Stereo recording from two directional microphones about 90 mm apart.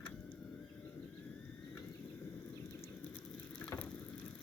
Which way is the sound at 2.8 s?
15° left (ahead or behind).